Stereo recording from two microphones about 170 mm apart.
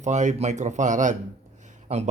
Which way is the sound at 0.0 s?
45° right (ahead or behind).